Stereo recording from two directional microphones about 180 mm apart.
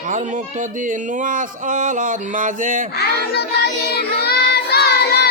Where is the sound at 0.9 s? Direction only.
45° right (ahead or behind).